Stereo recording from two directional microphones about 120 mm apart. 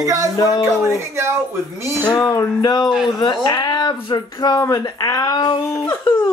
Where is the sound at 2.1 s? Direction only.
30° left (ahead or behind).